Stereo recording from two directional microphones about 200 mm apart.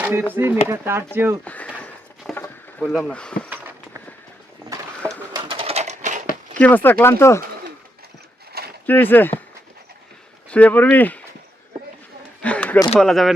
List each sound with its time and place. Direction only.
0.0 s speech: 10° right (ahead or behind)
1.5 s a sound: 5° left (ahead or behind)
2.8 s speech: centre (ahead or behind)
5.3 s bird: 25° right (ahead or behind)
6.6 s speech: 10° left (ahead or behind)
8.5 s a sound: 50° right (ahead or behind)
8.9 s speech: 10° left (ahead or behind)
10.5 s speech: 5° left (ahead or behind)
12.4 s a sound: 5° left (ahead or behind)
13.0 s speech: centre (ahead or behind)